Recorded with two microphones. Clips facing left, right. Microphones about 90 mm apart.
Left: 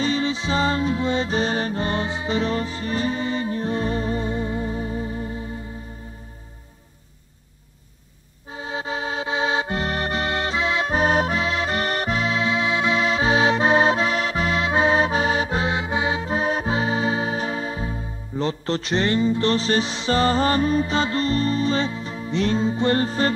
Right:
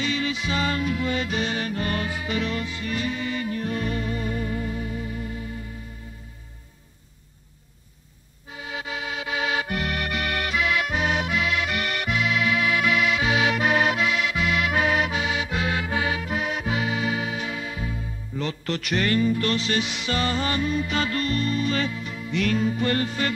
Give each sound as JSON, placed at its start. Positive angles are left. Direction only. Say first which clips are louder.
{"t": 0.0, "sound": "music", "louder": "left 4 dB", "side_deg": 30}
{"t": 8.5, "sound": "music", "louder": "left 5 dB", "side_deg": 30}